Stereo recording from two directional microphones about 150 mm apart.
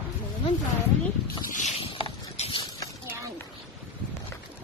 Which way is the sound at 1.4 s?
60° left (ahead or behind).